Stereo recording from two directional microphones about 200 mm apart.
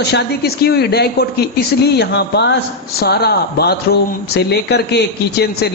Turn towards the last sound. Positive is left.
turn(degrees=55)  # may be behind; listen again after turning